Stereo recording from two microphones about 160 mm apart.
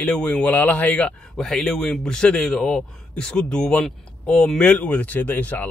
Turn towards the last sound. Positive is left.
turn(degrees=10)  # may be behind; listen again after turning